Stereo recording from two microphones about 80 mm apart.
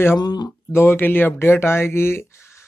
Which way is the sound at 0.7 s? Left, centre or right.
Left.